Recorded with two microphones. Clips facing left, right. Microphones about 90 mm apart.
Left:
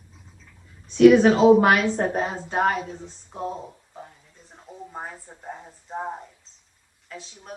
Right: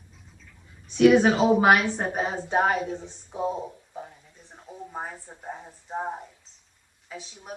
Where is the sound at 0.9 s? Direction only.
5° right (ahead or behind).